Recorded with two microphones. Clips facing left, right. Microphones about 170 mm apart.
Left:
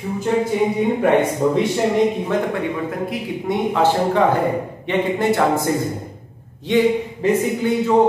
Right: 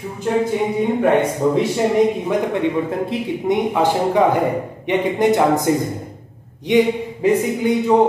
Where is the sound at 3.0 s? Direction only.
15° right (ahead or behind).